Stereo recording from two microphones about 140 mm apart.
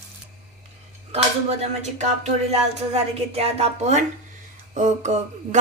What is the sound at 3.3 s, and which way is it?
A woman's voice, 45° right (ahead or behind).